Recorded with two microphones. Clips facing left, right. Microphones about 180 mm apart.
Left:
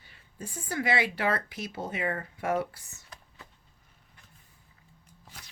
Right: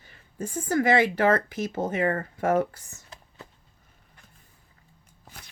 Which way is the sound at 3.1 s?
25° right (ahead or behind).